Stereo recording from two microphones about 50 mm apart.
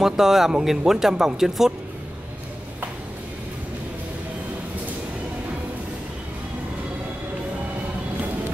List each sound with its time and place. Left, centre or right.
0.0 s speech: centre